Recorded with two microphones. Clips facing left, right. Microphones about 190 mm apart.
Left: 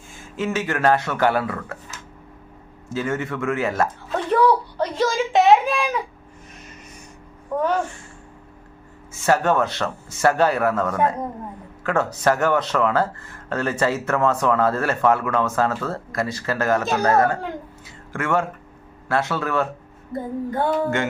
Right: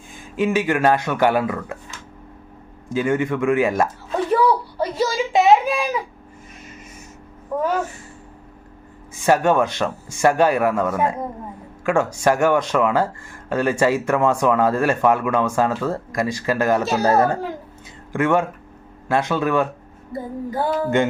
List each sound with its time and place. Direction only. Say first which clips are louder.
0.2 s speech: right 5 dB; 15° right (ahead or behind)
2.9 s speech: right 5 dB; 15° right (ahead or behind)
7.5 s speech: even; 10° right (ahead or behind)
9.2 s speech: right 2 dB; 15° right (ahead or behind)
18.1 s speech: right 4 dB; 15° right (ahead or behind)
20.1 s music: left 1 dB; 5° right (ahead or behind)